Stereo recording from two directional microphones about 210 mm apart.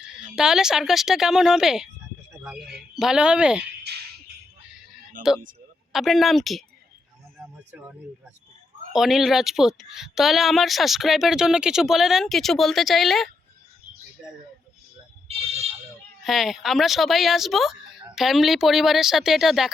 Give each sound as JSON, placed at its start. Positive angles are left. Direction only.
{"t": 0.0, "sound": "speech", "side_deg": -5}
{"t": 3.9, "sound": "music", "side_deg": -50}
{"t": 5.2, "sound": "speech", "side_deg": -40}
{"t": 5.9, "sound": "speech", "side_deg": 0}
{"t": 7.3, "sound": "music", "side_deg": -10}
{"t": 8.9, "sound": "speech", "side_deg": 0}
{"t": 16.2, "sound": "speech", "side_deg": 0}